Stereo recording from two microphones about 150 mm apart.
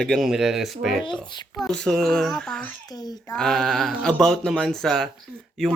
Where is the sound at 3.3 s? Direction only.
5° left (ahead or behind).